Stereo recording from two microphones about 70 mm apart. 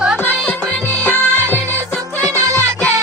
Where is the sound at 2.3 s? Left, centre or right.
Right.